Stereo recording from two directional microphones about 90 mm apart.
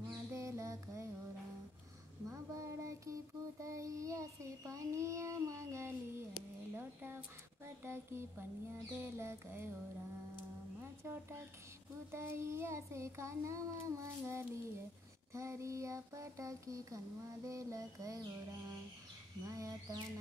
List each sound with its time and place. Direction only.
0.1 s mantra: 35° right (ahead or behind)
2.2 s a sound: 35° right (ahead or behind)
3.6 s child singing: 35° right (ahead or behind)
6.7 s speech: 25° right (ahead or behind)
7.6 s a sound: 25° right (ahead or behind)
10.8 s speech: 25° right (ahead or behind)
12.1 s child singing: 30° right (ahead or behind)
19.4 s child singing: 40° right (ahead or behind)